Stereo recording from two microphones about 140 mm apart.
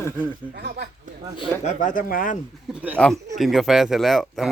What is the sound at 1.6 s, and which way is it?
Speech, 60° left (ahead or behind).